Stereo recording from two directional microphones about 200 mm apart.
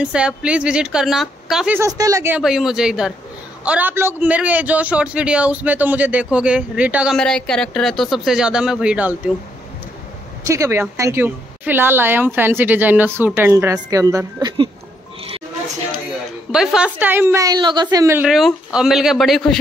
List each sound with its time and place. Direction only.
0.0 s a man's voice: 5° right (ahead or behind)
1.8 s a man's voice: 15° right (ahead or behind)
10.4 s a woman's voice: 15° right (ahead or behind)
16.5 s a man's voice: 5° right (ahead or behind)